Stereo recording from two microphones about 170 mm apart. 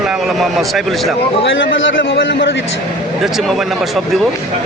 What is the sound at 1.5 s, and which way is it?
A man's voice, 90° left.